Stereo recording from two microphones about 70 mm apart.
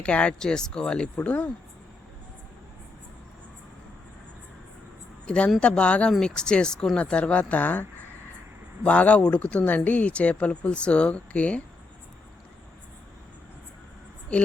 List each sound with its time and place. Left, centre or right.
0.0 s speech: centre
5.2 s a woman's voice: centre
14.3 s speech: centre